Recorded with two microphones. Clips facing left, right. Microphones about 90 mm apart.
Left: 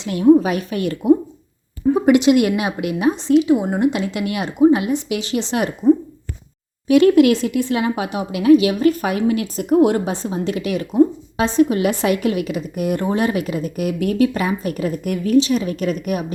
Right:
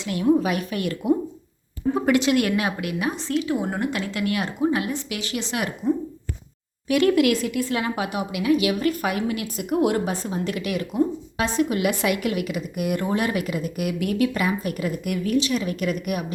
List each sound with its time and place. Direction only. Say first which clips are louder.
0.0 s speech: left 7 dB; 25° left (ahead or behind)
1.9 s speech: left 7 dB; 15° left (ahead or behind); by 16.2 s 30° left (ahead or behind)